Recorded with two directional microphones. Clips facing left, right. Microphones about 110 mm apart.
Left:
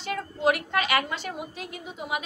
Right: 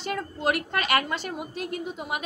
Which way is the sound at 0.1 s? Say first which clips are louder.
Left 2 dB; 50° right (ahead or behind).